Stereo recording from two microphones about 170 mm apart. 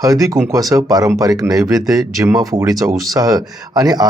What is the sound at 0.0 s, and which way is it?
Speech, 20° right (ahead or behind).